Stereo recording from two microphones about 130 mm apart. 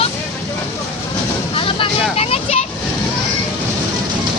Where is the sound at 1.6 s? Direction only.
45° left (ahead or behind).